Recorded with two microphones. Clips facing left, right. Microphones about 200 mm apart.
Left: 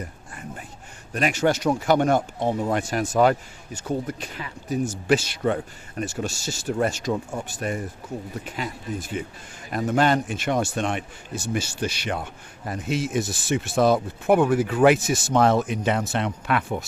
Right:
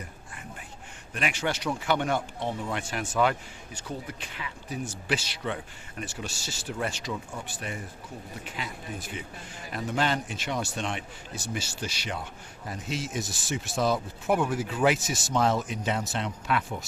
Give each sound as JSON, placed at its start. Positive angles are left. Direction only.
{"t": 1.1, "sound": "a man's voice", "side_deg": 40}